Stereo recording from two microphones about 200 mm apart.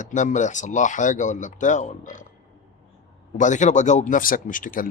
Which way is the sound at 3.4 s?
40° left (ahead or behind).